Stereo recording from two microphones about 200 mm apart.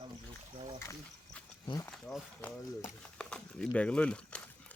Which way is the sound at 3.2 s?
5° left (ahead or behind).